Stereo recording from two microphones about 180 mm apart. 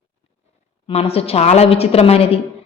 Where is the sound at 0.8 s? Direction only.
35° left (ahead or behind).